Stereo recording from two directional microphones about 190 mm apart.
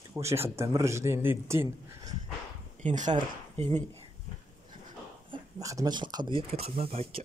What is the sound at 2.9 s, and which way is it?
Speech, 40° right (ahead or behind).